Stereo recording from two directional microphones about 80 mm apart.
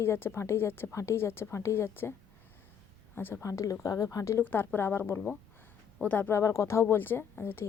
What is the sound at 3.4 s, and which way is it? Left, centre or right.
Speech, left.